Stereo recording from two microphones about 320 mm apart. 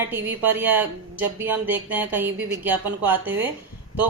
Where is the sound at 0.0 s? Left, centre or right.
Centre.